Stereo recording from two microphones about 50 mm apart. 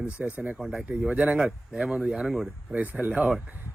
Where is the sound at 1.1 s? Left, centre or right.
Right.